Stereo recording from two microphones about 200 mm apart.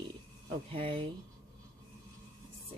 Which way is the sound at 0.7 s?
25° right (ahead or behind).